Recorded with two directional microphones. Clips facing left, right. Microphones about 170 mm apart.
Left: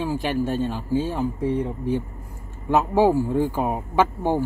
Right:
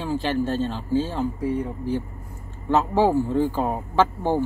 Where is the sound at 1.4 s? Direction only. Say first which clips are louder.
Left 2 dB; 25° left (ahead or behind).